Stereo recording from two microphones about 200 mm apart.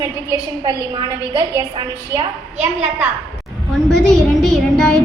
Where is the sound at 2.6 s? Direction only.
10° right (ahead or behind).